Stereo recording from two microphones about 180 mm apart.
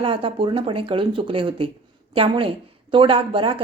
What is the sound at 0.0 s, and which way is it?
Speech, 30° right (ahead or behind).